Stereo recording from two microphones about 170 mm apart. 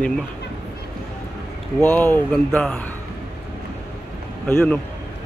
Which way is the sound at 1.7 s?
10° left (ahead or behind).